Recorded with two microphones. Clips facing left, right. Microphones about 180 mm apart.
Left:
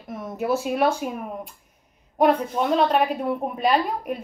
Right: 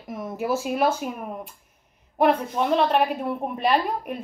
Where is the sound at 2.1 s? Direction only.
Centre (ahead or behind).